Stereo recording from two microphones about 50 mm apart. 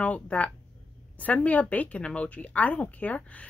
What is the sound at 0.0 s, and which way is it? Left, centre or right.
Speech, left.